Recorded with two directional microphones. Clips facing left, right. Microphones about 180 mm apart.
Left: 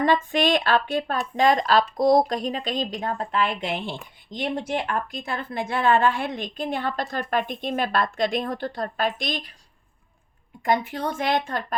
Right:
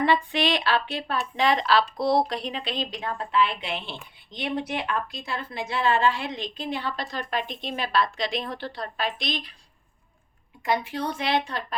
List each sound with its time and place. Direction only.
0.0 s speech: 45° left (ahead or behind)
10.6 s speech: 50° left (ahead or behind)